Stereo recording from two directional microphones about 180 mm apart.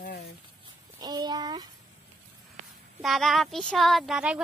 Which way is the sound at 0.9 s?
25° right (ahead or behind).